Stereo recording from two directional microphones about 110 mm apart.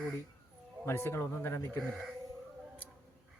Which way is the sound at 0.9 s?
20° left (ahead or behind).